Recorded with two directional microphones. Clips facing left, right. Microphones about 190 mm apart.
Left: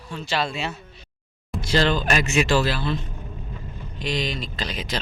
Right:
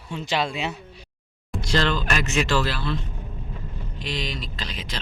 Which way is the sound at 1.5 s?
5° left (ahead or behind).